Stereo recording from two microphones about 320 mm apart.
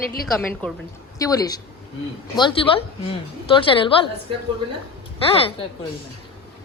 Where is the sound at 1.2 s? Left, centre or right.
Centre.